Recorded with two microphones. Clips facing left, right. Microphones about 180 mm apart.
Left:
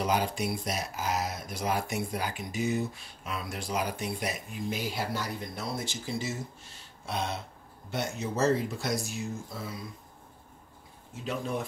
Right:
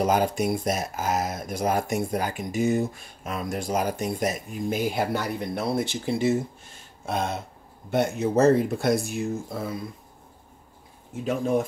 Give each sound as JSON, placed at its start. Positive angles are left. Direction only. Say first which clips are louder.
{"t": 0.0, "sound": "speech", "louder": "right 6 dB", "side_deg": -50}
{"t": 7.1, "sound": "speech", "louder": "right 6 dB", "side_deg": -50}
{"t": 11.2, "sound": "speech", "louder": "right 9 dB", "side_deg": -50}